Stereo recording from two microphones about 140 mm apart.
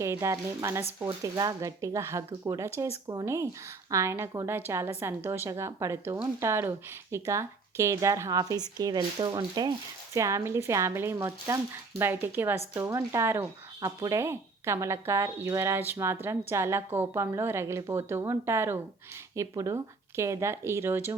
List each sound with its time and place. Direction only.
0.0 s speech: 20° right (ahead or behind)
10.2 s speech: 20° right (ahead or behind)
13.0 s speech: 30° right (ahead or behind)
13.2 s speech: 15° right (ahead or behind)